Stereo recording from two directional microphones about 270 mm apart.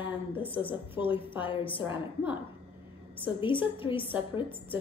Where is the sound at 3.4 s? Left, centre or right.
Centre.